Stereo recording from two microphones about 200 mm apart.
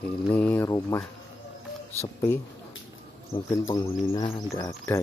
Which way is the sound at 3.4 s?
15° left (ahead or behind).